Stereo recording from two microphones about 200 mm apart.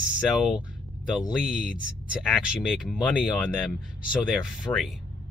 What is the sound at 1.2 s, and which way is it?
Speech, 5° right (ahead or behind).